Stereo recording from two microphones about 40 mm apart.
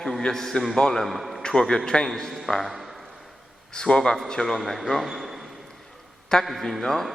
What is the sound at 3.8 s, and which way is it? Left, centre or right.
Speech, centre.